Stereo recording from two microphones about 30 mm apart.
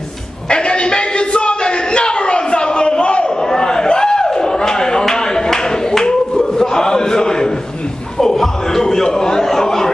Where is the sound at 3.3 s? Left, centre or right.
Left.